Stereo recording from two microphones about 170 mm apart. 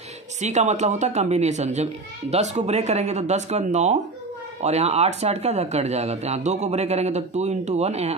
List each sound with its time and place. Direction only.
0.4 s speech: 40° right (ahead or behind)